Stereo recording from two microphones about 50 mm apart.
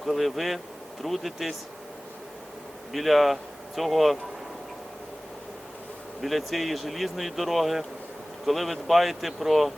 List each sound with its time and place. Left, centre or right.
0.0 s speech: centre
2.9 s speech: centre
6.2 s speech: centre